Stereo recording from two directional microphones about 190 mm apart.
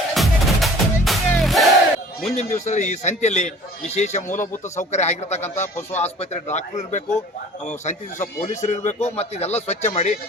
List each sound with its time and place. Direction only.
0.1 s music: centre (ahead or behind)
2.3 s a man's voice: 35° left (ahead or behind)